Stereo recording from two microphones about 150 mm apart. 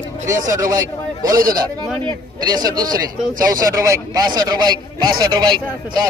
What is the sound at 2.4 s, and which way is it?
A man's voice, 25° right (ahead or behind).